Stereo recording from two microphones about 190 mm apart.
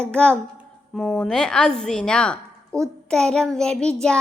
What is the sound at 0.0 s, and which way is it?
Speech, 5° left (ahead or behind).